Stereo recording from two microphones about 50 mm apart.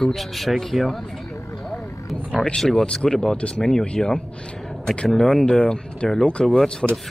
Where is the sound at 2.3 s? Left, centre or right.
Left.